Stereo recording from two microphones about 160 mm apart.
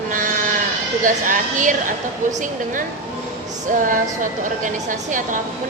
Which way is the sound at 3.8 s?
55° right (ahead or behind).